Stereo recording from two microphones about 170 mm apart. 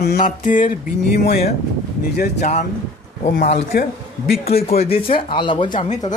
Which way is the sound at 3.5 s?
65° left (ahead or behind).